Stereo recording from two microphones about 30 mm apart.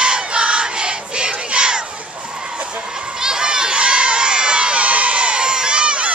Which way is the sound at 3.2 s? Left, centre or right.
Right.